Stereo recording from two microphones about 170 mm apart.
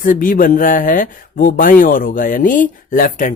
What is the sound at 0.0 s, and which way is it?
Speech, 55° left (ahead or behind).